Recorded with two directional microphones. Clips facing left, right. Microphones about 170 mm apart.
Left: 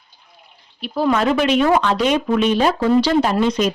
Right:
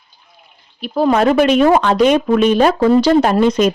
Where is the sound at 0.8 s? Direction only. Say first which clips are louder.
Right 4 dB; 45° right (ahead or behind).